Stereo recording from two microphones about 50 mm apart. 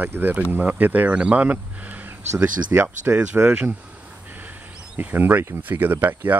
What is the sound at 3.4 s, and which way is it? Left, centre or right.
Speech, right.